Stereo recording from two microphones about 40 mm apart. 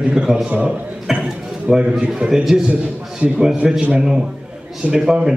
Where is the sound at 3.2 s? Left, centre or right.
Right.